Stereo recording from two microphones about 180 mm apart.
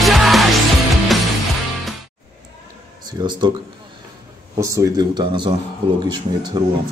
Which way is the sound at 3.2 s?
25° right (ahead or behind).